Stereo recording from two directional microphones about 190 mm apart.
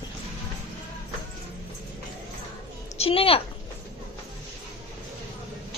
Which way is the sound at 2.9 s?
30° left (ahead or behind).